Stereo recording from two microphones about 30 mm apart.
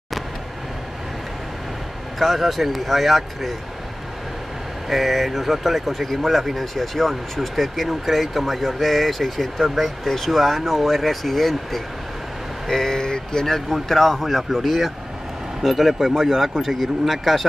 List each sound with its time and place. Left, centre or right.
2.1 s speech: centre
4.8 s speech: centre
14.6 s speech: centre